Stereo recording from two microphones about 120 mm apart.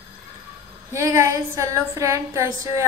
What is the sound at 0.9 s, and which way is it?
Female singing, 25° right (ahead or behind).